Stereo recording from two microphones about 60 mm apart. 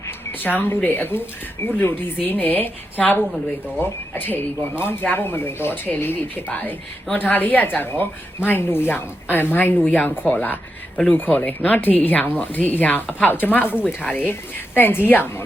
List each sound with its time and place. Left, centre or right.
0.4 s a woman's voice: left